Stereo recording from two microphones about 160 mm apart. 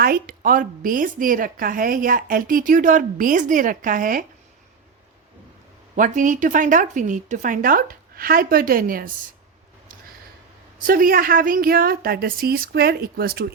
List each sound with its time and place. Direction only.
0.0 s a woman's voice: 65° right (ahead or behind)
6.0 s a woman's voice: 55° right (ahead or behind)
10.8 s a woman's voice: 60° right (ahead or behind)